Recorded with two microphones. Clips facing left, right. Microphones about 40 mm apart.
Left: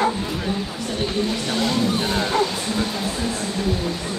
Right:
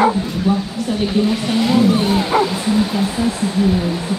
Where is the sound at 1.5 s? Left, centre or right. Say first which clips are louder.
Right 8 dB; centre.